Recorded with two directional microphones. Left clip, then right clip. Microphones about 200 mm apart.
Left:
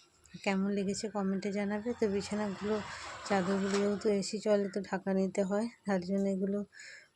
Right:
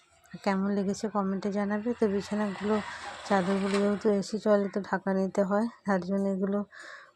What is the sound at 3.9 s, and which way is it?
Speech, 15° right (ahead or behind).